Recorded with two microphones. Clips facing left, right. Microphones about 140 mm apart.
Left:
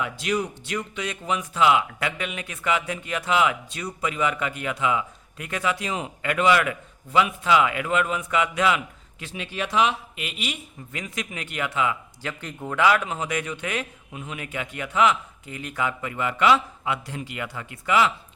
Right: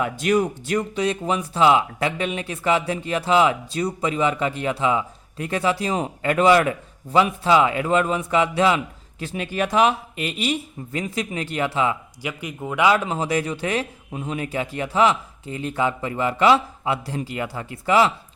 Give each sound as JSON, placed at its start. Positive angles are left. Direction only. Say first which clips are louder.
{"t": 0.0, "sound": "speech", "louder": "right 6 dB", "side_deg": -50}
{"t": 12.2, "sound": "speech", "louder": "right 3 dB", "side_deg": -10}
{"t": 12.8, "sound": "speech", "louder": "right 2 dB", "side_deg": -25}